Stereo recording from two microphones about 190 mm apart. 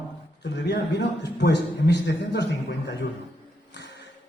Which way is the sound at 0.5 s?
65° left (ahead or behind).